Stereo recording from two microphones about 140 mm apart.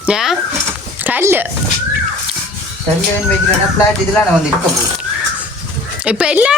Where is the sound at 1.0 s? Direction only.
15° right (ahead or behind).